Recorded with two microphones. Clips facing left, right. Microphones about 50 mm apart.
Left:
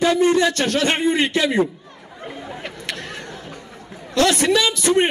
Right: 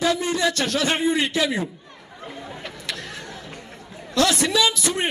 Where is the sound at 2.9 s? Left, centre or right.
Left.